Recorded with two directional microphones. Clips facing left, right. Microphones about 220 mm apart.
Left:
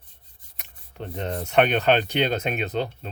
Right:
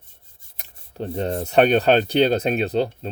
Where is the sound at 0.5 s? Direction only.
35° right (ahead or behind).